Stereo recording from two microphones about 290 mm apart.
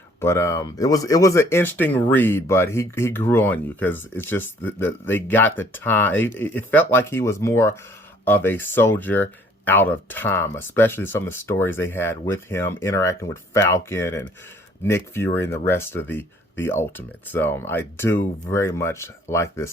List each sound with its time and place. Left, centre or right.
0.2 s speech: centre